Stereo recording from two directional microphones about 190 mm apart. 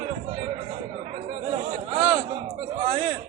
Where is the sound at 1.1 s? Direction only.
35° right (ahead or behind).